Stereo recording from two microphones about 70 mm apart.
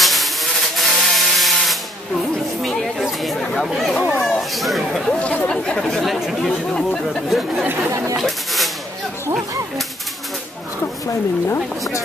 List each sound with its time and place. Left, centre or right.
0.0 s vehicle: centre
2.6 s chatter: centre
3.6 s speech: centre
5.2 s speech: left
5.5 s speech: centre
7.9 s speech: right
8.2 s speech: centre
11.1 s speech: left